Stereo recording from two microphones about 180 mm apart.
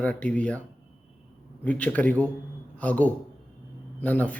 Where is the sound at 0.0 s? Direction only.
10° left (ahead or behind).